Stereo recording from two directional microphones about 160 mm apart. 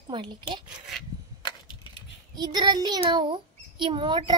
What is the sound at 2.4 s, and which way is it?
A child's voice, 25° right (ahead or behind).